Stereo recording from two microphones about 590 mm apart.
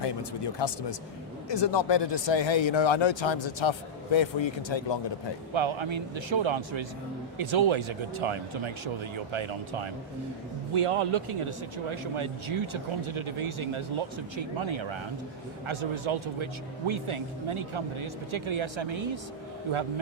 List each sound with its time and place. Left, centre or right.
0.0 s speech: left
5.5 s speech: right